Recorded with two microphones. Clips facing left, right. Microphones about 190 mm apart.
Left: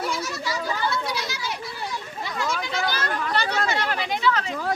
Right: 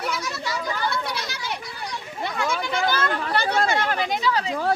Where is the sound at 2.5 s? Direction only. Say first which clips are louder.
Right 3 dB; 55° right (ahead or behind).